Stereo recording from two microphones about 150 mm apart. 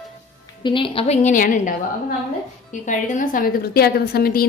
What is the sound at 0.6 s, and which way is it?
A woman's voice, 35° left (ahead or behind).